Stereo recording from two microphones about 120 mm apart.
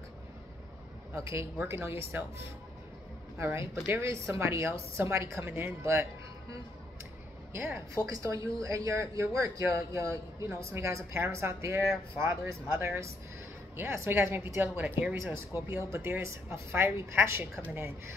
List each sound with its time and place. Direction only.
1.1 s speech: 25° right (ahead or behind)
8.1 s speech: 30° right (ahead or behind); by 15.1 s 10° right (ahead or behind)
15.1 s speech: 20° right (ahead or behind)